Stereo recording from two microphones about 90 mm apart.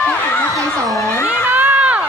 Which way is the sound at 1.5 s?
15° right (ahead or behind).